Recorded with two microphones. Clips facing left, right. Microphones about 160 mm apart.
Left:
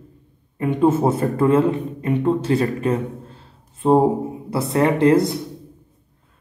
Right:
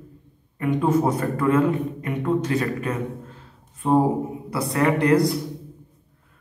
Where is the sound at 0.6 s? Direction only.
25° left (ahead or behind).